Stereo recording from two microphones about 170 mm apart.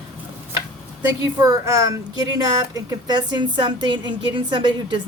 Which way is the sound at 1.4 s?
20° right (ahead or behind).